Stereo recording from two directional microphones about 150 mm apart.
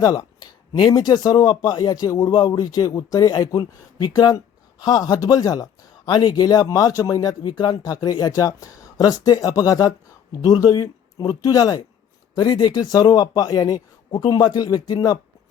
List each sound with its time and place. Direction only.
0.0 s speech: 25° left (ahead or behind)